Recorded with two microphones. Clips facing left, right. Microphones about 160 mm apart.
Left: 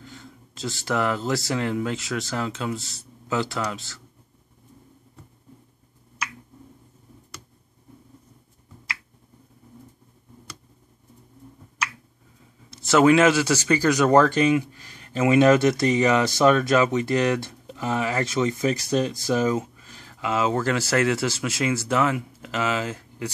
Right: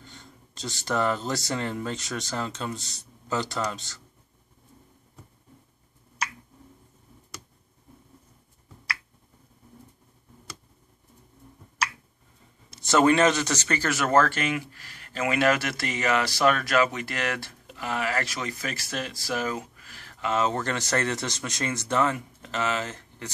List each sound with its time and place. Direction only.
0.0 s speech: centre (ahead or behind)
12.7 s speech: centre (ahead or behind); by 20.2 s 20° left (ahead or behind)
20.2 s speech: 10° left (ahead or behind)